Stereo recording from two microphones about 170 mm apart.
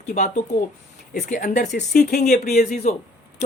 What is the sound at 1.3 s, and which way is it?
Speech, 50° left (ahead or behind).